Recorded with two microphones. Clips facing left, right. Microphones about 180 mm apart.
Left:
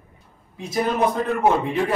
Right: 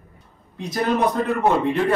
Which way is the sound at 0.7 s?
Centre (ahead or behind).